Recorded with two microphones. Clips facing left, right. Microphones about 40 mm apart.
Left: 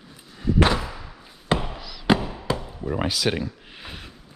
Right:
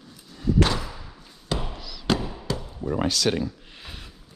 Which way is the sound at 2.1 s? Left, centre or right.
Left.